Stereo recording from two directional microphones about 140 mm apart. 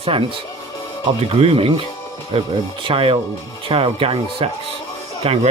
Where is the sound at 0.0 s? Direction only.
40° right (ahead or behind).